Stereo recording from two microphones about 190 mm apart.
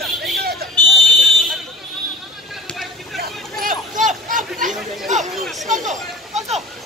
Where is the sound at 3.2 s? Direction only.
45° right (ahead or behind).